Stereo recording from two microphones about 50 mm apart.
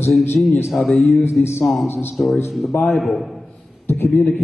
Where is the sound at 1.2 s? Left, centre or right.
Left.